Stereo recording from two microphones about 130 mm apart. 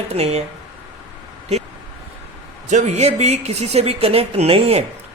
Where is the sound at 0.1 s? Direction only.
55° right (ahead or behind).